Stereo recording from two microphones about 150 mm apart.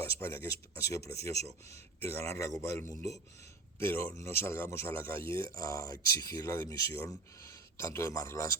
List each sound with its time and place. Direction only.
0.3 s speech: 20° left (ahead or behind)